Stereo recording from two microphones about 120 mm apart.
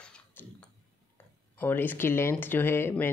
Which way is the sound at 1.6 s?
15° left (ahead or behind).